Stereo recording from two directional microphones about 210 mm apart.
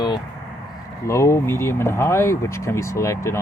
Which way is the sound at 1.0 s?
15° left (ahead or behind).